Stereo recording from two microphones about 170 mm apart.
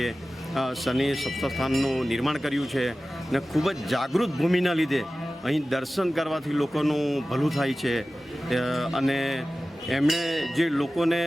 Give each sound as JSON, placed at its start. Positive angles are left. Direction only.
{"t": 0.5, "sound": "speech", "side_deg": 0}